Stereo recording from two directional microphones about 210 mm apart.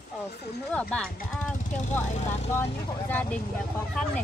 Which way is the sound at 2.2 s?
30° left (ahead or behind).